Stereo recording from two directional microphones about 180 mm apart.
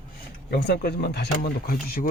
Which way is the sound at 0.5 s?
65° left (ahead or behind).